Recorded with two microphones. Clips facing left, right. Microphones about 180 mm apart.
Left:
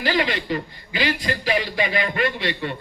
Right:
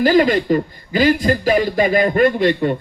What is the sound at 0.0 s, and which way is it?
A man's voice, 45° right (ahead or behind).